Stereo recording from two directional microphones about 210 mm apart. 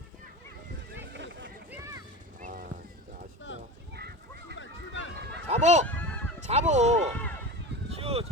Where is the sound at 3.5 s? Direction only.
65° left (ahead or behind).